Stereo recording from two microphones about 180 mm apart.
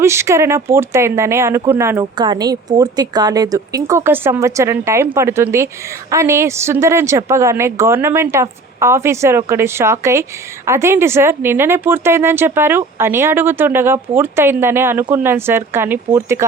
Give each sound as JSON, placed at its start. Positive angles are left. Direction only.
{"t": 0.0, "sound": "a woman's voice", "side_deg": -15}
{"t": 2.1, "sound": "a woman's voice", "side_deg": -25}